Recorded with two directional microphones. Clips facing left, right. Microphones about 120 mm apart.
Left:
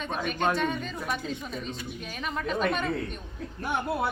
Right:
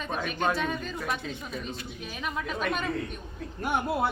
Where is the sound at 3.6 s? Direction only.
15° right (ahead or behind).